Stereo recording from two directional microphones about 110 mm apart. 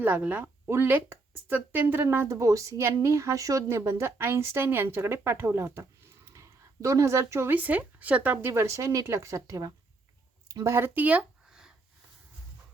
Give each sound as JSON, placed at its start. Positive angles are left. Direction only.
{"t": 0.0, "sound": "speech", "side_deg": -15}